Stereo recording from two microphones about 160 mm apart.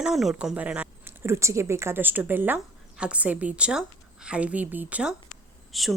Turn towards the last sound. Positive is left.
turn(degrees=0)  # may be behind; listen again after turning